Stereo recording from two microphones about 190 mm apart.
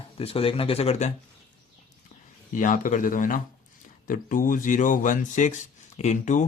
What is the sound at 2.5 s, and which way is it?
A man's voice, 45° left (ahead or behind).